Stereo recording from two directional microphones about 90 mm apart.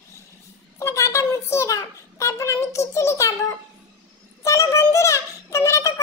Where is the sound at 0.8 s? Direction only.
30° left (ahead or behind).